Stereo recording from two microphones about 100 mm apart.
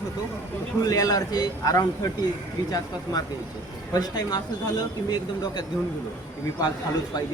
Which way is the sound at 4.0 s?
40° left (ahead or behind).